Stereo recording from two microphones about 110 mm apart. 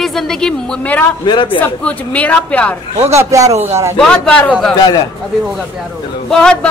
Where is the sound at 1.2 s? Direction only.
45° left (ahead or behind).